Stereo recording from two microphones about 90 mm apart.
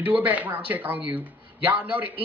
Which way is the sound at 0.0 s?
15° right (ahead or behind).